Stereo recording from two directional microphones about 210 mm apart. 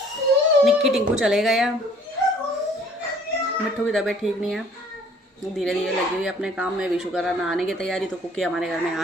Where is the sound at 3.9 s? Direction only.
Centre (ahead or behind).